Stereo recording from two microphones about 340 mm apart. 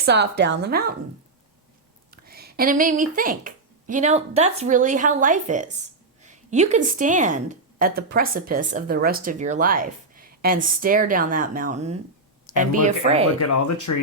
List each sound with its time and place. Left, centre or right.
0.0 s a woman's voice: right
2.0 s a woman's voice: right
13.5 s speech: left